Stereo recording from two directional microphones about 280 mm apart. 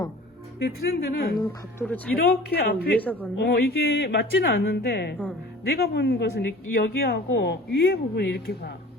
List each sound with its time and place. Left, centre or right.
0.6 s speech: left
1.4 s speech: centre
2.1 s speech: left
3.0 s a man's voice: centre
3.4 s speech: left